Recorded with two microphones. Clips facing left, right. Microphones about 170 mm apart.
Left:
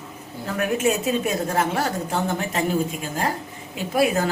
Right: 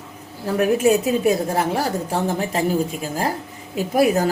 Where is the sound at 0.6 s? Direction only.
35° right (ahead or behind).